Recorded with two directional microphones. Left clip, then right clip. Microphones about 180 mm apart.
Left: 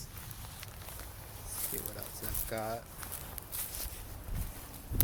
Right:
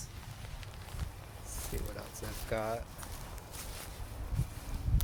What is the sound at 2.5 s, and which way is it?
Speech, 10° right (ahead or behind).